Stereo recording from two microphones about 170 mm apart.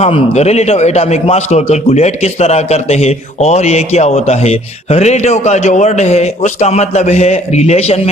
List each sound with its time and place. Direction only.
0.0 s a man's voice: 40° left (ahead or behind)